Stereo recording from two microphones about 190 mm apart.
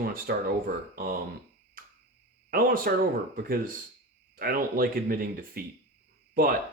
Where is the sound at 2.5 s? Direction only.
50° right (ahead or behind).